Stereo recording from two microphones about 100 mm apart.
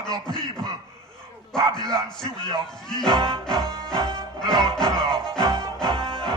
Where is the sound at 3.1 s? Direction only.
50° right (ahead or behind).